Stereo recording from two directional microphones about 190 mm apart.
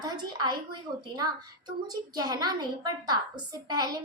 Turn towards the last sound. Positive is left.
turn(degrees=-20)  # may be behind; listen again after turning